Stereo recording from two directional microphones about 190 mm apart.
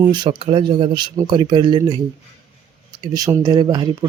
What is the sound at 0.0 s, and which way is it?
Speech, 25° right (ahead or behind).